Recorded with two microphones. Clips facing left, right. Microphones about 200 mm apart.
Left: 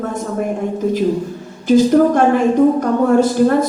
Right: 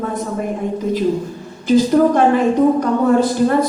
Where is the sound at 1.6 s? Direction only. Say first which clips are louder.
Left 2 dB; 50° left (ahead or behind).